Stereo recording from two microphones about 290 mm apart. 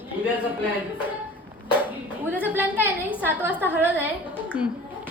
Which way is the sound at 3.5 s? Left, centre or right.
Centre.